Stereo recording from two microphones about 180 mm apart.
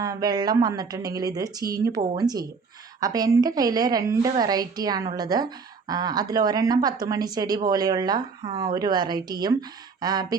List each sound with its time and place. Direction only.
0.0 s a woman's voice: 20° right (ahead or behind)